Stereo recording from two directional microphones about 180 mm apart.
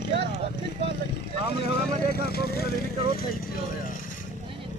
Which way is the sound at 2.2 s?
60° left (ahead or behind).